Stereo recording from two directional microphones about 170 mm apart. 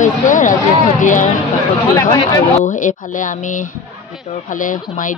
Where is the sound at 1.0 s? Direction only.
50° left (ahead or behind).